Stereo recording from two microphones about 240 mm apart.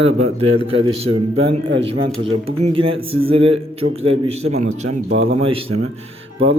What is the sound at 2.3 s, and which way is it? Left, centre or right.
A man's voice, right.